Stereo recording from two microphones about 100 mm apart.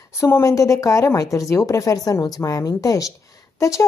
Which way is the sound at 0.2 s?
30° left (ahead or behind).